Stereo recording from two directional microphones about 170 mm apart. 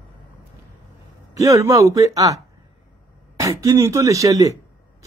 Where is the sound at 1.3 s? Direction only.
20° right (ahead or behind).